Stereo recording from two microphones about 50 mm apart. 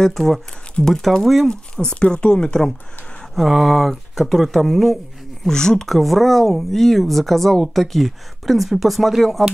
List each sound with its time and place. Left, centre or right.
0.0 s speech: centre
1.5 s speech: centre
3.3 s speech: centre
5.5 s speech: centre